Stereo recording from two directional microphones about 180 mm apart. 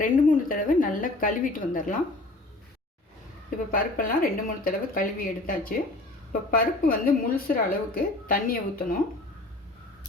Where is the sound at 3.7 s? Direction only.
50° left (ahead or behind).